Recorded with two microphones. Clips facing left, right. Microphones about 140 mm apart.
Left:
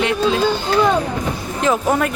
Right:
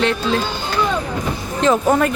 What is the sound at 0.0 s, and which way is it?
Speech, 10° left (ahead or behind).